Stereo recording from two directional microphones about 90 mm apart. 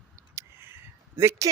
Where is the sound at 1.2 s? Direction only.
35° right (ahead or behind).